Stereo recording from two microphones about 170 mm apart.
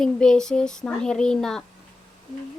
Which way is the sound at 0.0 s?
5° left (ahead or behind).